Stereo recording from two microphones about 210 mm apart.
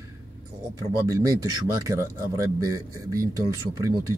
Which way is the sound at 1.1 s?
15° right (ahead or behind).